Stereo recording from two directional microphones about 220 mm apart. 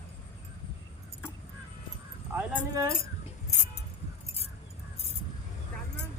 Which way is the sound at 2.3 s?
5° right (ahead or behind).